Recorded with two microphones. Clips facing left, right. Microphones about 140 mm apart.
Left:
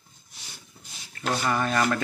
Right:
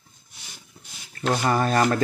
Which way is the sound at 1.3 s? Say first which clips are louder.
Right 4 dB; 40° right (ahead or behind).